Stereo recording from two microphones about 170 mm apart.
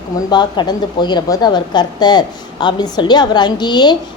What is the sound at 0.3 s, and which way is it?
A woman's voice, 25° left (ahead or behind).